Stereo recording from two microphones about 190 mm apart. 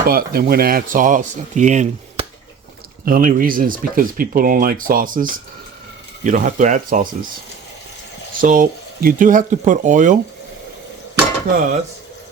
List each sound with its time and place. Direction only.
0.1 s speech: 55° right (ahead or behind)
8.4 s speech: 45° right (ahead or behind)
11.1 s dishes: 50° right (ahead or behind)